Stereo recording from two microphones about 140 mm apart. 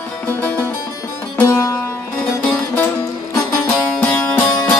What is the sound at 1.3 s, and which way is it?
Music, 20° left (ahead or behind).